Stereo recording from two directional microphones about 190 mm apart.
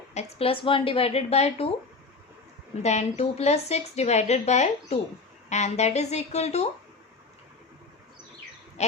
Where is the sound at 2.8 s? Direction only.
35° left (ahead or behind).